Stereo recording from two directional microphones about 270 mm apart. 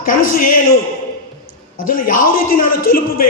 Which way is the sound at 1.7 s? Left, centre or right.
Left.